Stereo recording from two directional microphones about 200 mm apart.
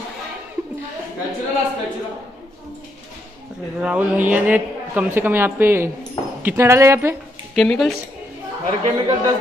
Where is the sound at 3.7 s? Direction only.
5° right (ahead or behind).